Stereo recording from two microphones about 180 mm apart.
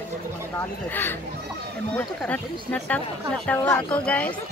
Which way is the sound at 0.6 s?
10° left (ahead or behind).